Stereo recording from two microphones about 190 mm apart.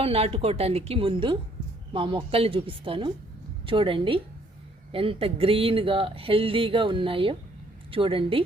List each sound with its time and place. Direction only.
0.0 s speech: 30° right (ahead or behind)